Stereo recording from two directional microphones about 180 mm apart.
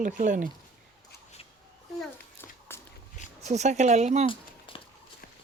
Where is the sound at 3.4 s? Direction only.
40° right (ahead or behind).